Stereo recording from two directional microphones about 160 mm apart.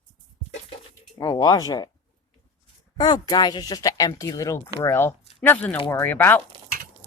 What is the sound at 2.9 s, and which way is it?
Speech, 25° left (ahead or behind).